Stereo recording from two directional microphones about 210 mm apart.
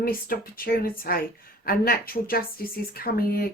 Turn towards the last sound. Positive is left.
turn(degrees=45)  # may be behind; listen again after turning